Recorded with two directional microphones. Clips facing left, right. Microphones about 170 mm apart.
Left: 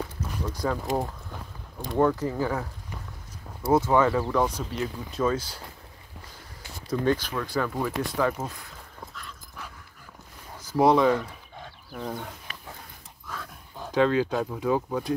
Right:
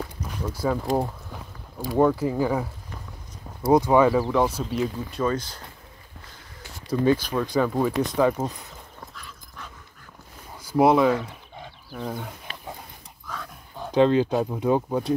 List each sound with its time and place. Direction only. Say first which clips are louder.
0.2 s speech: right 3 dB; 10° right (ahead or behind)
3.7 s speech: right 4 dB; 15° right (ahead or behind)
5.1 s speech: right 1 dB; 5° left (ahead or behind)
6.9 s speech: right 4 dB; 5° right (ahead or behind)
9.1 s dog: left 1 dB; centre (ahead or behind)
10.6 s a sound: right 2 dB; 10° right (ahead or behind)
13.3 s a sound: right 2 dB; centre (ahead or behind)
13.9 s speech: right 4 dB; 20° right (ahead or behind)